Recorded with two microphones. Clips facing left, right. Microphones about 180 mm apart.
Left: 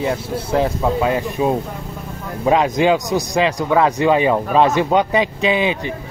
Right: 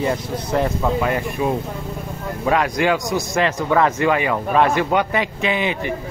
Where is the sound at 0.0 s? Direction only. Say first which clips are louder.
Left 1 dB; 5° left (ahead or behind).